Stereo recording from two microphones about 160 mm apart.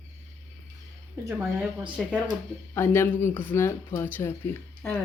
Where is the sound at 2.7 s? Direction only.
15° left (ahead or behind).